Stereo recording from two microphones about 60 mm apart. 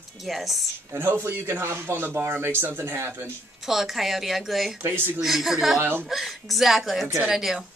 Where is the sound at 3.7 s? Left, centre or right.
Centre.